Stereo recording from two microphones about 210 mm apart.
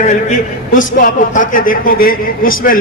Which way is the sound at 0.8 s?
40° left (ahead or behind).